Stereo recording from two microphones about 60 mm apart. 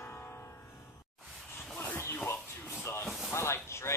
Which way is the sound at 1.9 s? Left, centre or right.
Left.